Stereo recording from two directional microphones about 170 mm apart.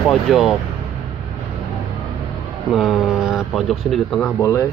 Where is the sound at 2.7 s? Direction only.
Centre (ahead or behind).